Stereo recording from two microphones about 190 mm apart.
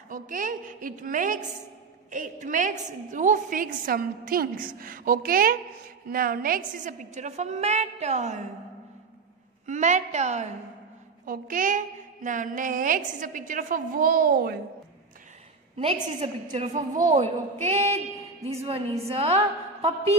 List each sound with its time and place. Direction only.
0.1 s a woman's voice: 45° right (ahead or behind)
9.7 s a woman's voice: 40° right (ahead or behind)
15.8 s a woman's voice: 30° right (ahead or behind)